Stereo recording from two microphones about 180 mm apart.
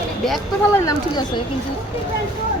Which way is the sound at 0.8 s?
20° left (ahead or behind).